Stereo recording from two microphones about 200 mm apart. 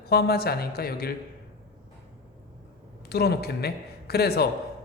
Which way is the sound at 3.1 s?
50° left (ahead or behind).